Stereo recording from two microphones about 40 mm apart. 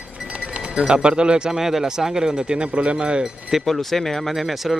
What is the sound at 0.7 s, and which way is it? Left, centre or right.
Speech, right.